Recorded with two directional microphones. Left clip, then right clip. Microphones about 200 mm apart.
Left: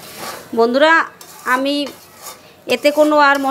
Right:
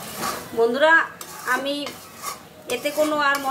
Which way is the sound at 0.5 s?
40° left (ahead or behind).